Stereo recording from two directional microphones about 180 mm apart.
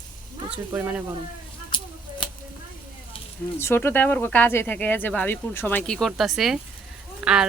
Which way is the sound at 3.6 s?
15° left (ahead or behind).